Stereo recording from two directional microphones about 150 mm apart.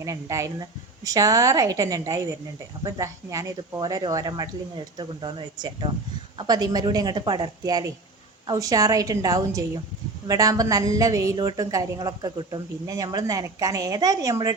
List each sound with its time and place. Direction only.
0.0 s a woman's voice: 20° right (ahead or behind)